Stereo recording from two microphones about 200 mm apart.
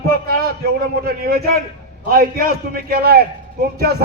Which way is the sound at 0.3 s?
50° right (ahead or behind).